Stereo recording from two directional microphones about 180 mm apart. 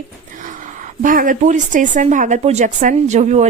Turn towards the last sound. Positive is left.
turn(degrees=-40)  # may be behind; listen again after turning